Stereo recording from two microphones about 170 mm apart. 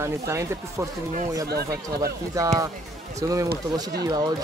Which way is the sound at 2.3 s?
20° right (ahead or behind).